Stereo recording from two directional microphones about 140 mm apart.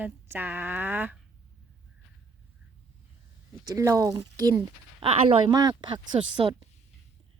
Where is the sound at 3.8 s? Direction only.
25° right (ahead or behind).